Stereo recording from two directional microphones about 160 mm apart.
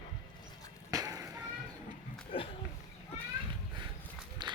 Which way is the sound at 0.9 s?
20° right (ahead or behind).